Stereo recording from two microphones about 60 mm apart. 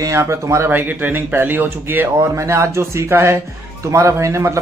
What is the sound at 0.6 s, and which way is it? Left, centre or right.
Speech, right.